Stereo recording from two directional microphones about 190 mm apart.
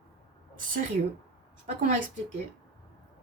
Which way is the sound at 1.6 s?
45° right (ahead or behind).